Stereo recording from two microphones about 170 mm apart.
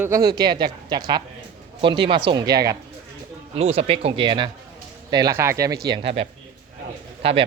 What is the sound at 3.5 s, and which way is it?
Speech, 40° right (ahead or behind).